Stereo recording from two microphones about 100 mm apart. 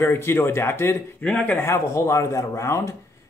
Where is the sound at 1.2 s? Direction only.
15° left (ahead or behind).